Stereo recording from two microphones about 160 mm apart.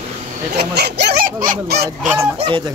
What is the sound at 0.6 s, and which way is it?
Speech, 90° right.